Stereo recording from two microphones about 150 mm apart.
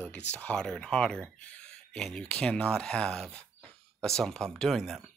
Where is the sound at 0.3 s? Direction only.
10° left (ahead or behind).